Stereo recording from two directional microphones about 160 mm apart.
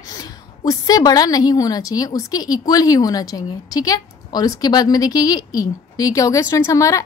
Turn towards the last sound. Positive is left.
turn(degrees=20)  # may be behind; listen again after turning